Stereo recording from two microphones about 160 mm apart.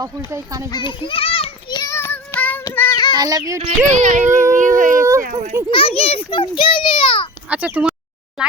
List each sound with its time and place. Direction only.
0.3 s speech: 20° right (ahead or behind)
0.7 s child singing: 30° left (ahead or behind)
3.2 s speech: 25° right (ahead or behind)
3.6 s speech: 50° right (ahead or behind)
4.5 s a sound: 55° right (ahead or behind)
5.2 s a child's voice: 60° right (ahead or behind)
5.7 s a child's voice: 35° left (ahead or behind)
7.5 s speech: 10° right (ahead or behind)